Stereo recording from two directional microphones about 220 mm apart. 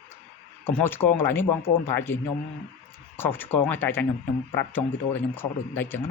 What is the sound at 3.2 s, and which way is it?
Speech, 10° left (ahead or behind).